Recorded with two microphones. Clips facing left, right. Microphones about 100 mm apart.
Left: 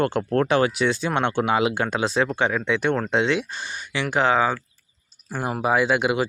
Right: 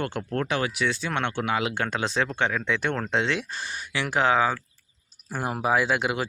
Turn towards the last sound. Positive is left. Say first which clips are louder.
# left 4 dB
turn(degrees=5)  # may be behind; listen again after turning